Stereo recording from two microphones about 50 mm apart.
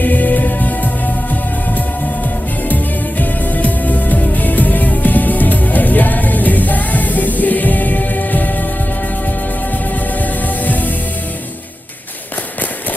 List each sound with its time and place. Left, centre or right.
0.0 s music: left
3.2 s music: left
10.2 s music: left